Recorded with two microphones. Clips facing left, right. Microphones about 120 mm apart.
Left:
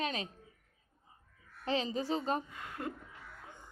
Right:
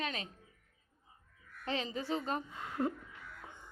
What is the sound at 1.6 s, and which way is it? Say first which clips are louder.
Speech: left 3 dB; 30° left (ahead or behind).